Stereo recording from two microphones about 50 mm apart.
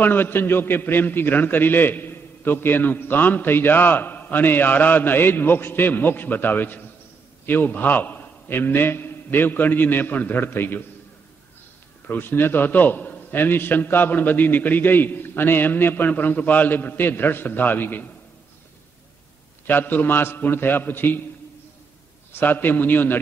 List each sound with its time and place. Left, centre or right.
0.0 s a man's voice: left
12.1 s a man's voice: left
19.6 s a man's voice: left
22.3 s a man's voice: left